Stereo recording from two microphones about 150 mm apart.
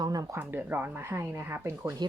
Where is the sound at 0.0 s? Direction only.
25° right (ahead or behind).